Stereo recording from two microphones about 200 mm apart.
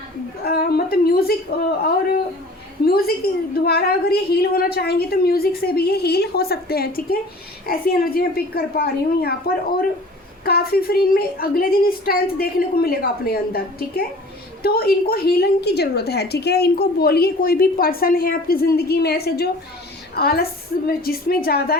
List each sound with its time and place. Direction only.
0.4 s a woman's voice: 50° left (ahead or behind)
3.2 s a woman's voice: 50° left (ahead or behind)
10.4 s a woman's voice: 50° left (ahead or behind)